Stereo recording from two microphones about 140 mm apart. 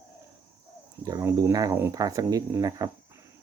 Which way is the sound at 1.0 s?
25° right (ahead or behind).